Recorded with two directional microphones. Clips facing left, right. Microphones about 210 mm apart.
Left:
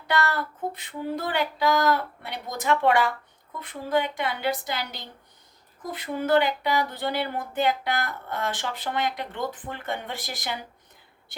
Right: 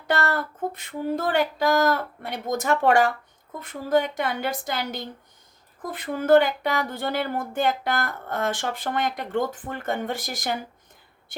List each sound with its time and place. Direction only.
0.1 s speech: 45° right (ahead or behind)